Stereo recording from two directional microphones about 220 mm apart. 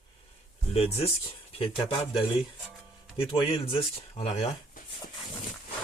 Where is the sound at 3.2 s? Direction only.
25° left (ahead or behind).